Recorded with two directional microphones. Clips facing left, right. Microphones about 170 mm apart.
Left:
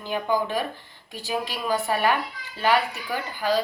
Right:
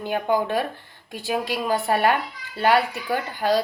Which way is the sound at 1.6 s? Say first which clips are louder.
Right 2 dB; 55° right (ahead or behind).